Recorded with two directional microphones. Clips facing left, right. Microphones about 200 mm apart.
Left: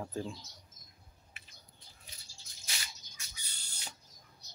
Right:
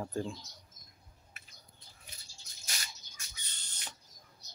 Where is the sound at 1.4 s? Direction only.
45° right (ahead or behind).